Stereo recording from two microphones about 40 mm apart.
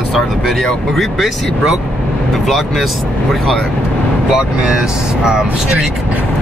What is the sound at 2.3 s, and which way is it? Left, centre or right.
Speech, centre.